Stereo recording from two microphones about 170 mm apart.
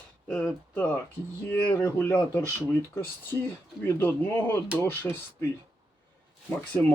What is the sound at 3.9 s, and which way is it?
Speech, 10° left (ahead or behind).